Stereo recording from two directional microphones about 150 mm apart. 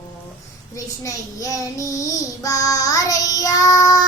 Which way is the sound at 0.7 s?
20° left (ahead or behind).